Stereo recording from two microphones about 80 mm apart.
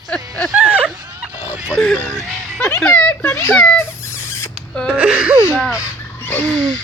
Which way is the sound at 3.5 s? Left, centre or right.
Centre.